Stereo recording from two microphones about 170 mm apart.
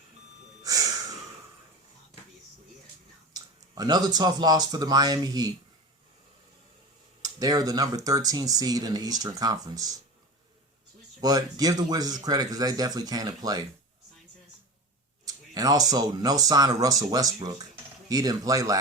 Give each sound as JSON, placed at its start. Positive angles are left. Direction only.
{"t": 0.6, "sound": "snort", "side_deg": -20}
{"t": 3.3, "sound": "speech", "side_deg": -25}
{"t": 7.2, "sound": "speech", "side_deg": -20}
{"t": 11.2, "sound": "speech", "side_deg": -20}
{"t": 15.2, "sound": "speech", "side_deg": -20}